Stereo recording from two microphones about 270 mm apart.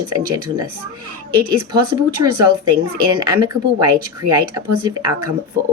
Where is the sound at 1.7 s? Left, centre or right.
Centre.